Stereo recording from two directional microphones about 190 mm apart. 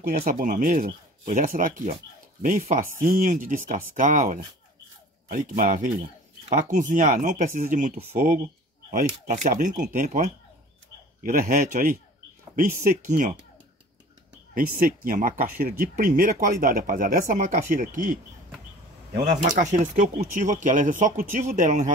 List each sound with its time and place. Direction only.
0.0 s speech: 50° right (ahead or behind)
5.6 s speech: 45° right (ahead or behind)
13.0 s speech: 40° right (ahead or behind)
14.5 s speech: 50° right (ahead or behind)
19.2 s speech: 40° right (ahead or behind)